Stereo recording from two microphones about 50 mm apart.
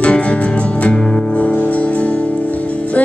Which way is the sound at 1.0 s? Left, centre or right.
Centre.